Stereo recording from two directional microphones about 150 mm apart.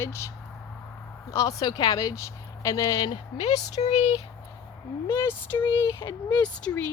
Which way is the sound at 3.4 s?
50° left (ahead or behind).